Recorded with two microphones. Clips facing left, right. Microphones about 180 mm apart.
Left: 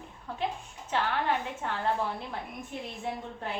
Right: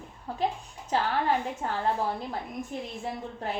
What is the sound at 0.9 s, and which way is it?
Speech, 40° right (ahead or behind).